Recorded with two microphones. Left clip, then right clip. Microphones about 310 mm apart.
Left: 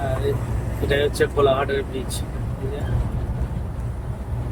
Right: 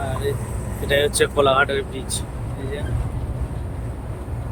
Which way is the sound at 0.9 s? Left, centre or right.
Centre.